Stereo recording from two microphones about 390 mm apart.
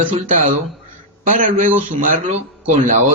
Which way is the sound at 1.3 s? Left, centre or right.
Centre.